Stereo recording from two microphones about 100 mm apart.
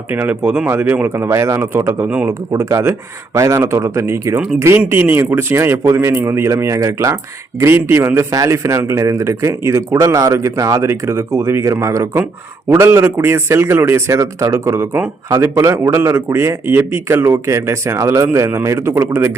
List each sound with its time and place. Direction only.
0.1 s a man's voice: 20° right (ahead or behind)
2.0 s a man's voice: 15° right (ahead or behind)
2.2 s a man's voice: 30° right (ahead or behind)